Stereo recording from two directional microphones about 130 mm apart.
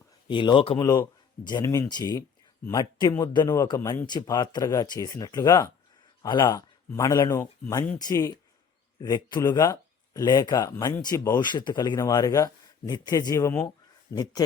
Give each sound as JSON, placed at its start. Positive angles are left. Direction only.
{"t": 0.3, "sound": "speech", "side_deg": 35}
{"t": 0.8, "sound": "a man's voice", "side_deg": 30}